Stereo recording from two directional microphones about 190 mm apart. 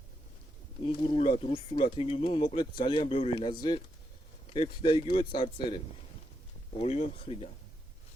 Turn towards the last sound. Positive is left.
turn(degrees=30)  # may be behind; listen again after turning